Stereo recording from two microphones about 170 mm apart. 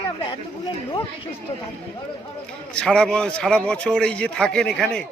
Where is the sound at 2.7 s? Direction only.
5° left (ahead or behind).